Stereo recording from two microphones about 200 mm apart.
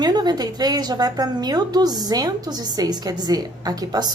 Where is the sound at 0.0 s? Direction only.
20° right (ahead or behind).